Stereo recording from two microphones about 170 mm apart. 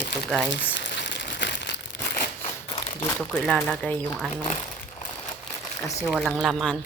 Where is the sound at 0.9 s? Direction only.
90° left.